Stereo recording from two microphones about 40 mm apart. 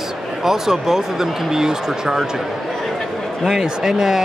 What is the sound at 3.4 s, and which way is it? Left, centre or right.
Speech, centre.